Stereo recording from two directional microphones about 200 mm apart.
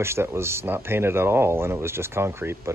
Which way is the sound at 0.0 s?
15° right (ahead or behind).